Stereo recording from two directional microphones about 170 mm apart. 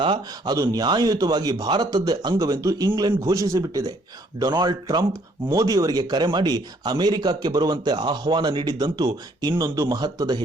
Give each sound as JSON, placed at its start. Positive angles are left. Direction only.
{"t": 0.0, "sound": "speech", "side_deg": -25}